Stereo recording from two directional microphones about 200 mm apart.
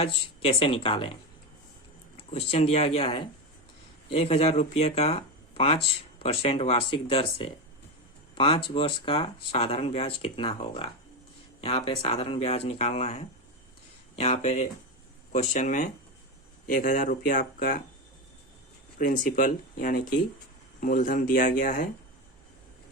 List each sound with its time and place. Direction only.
0.0 s speech: 30° left (ahead or behind)
2.1 s speech: 30° left (ahead or behind)
18.9 s speech: 40° left (ahead or behind)